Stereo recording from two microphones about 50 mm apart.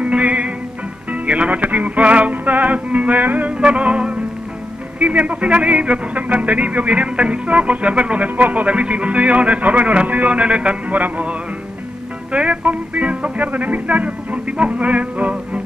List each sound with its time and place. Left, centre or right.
0.0 s music: right
1.1 s a man's voice: right
3.5 s a man's voice: right